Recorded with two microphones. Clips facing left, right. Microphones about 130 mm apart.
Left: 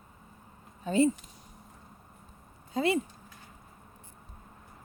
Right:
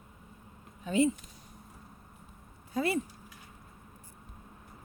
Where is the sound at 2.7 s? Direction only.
25° left (ahead or behind).